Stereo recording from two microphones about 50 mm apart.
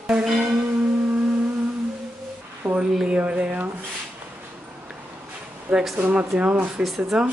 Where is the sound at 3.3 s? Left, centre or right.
Right.